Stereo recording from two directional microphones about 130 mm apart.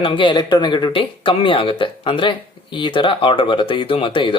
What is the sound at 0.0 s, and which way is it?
Speech, 40° left (ahead or behind).